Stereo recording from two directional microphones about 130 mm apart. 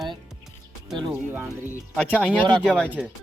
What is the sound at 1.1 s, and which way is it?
Speech, 15° right (ahead or behind).